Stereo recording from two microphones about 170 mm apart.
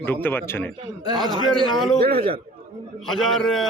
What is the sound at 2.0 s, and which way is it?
Speech, 65° right (ahead or behind).